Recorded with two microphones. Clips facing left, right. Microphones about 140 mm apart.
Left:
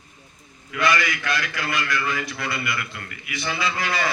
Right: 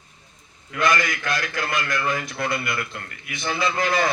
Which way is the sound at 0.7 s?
50° right (ahead or behind).